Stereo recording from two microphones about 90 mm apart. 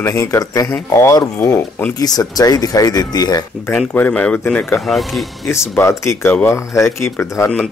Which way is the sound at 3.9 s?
15° left (ahead or behind).